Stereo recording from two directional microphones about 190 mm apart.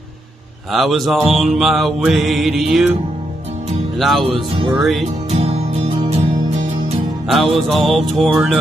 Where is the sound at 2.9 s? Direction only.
35° right (ahead or behind).